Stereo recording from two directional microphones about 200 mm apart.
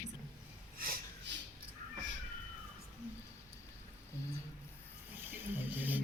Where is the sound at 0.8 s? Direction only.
45° right (ahead or behind).